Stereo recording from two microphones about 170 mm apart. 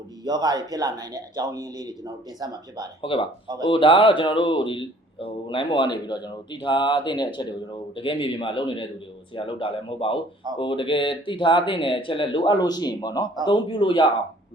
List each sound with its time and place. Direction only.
0.3 s speech: 25° right (ahead or behind)
3.0 s speech: 30° left (ahead or behind)